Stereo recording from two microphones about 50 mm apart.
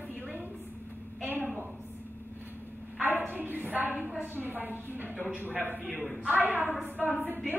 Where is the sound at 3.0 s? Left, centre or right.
Right.